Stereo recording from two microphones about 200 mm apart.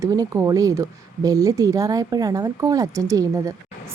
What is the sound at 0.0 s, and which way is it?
Speech, 15° right (ahead or behind).